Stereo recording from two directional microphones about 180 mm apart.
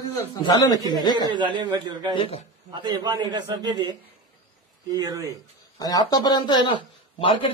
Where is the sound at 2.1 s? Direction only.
30° left (ahead or behind).